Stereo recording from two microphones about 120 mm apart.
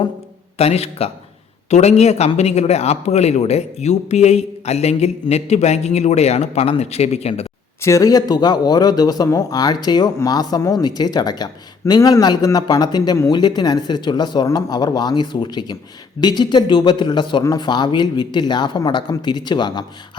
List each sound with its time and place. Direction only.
0.6 s a man's voice: 60° left (ahead or behind)
7.8 s speech: 25° left (ahead or behind)